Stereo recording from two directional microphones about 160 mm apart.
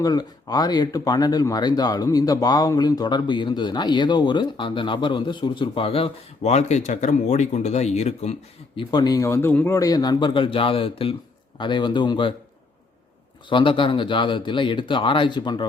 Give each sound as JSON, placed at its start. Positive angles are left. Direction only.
{"t": 0.0, "sound": "speech", "side_deg": 25}
{"t": 13.5, "sound": "speech", "side_deg": 30}